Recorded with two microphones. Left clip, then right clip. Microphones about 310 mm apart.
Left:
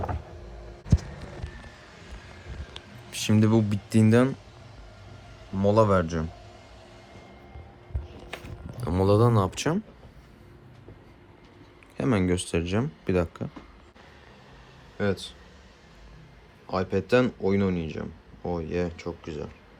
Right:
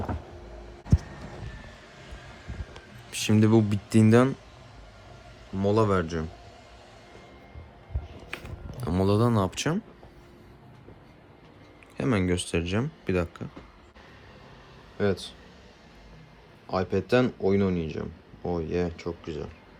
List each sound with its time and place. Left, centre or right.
2.7 s speech: centre
5.5 s speech: centre
8.8 s a sound: centre
11.9 s speech: centre
14.9 s speech: centre
16.6 s speech: centre